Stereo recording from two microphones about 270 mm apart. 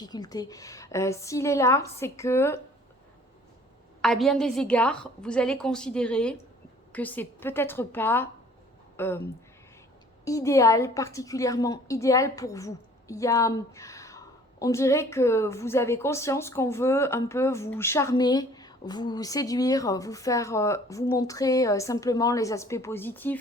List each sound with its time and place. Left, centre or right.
0.0 s a woman's voice: centre
4.0 s a woman's voice: centre
10.2 s a woman's voice: centre